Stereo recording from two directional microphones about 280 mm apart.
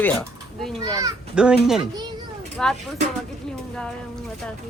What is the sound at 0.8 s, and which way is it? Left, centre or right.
Speech, centre.